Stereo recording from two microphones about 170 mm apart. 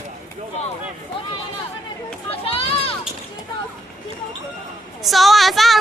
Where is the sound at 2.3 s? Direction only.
35° left (ahead or behind).